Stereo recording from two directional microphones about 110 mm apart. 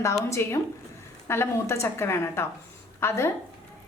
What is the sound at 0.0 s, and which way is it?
A woman's voice, 25° left (ahead or behind).